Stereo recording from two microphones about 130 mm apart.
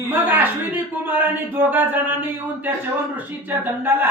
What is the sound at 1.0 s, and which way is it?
Speech, 15° right (ahead or behind).